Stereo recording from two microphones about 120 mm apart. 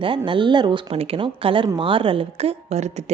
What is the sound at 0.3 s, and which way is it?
A woman's voice, 40° right (ahead or behind).